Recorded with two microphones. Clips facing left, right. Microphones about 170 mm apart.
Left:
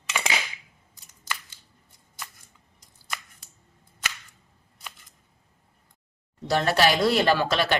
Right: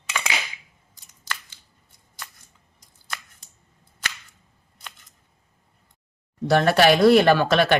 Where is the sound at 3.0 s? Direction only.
5° left (ahead or behind).